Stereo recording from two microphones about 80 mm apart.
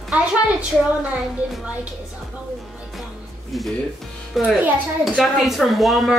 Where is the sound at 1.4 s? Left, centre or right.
Centre.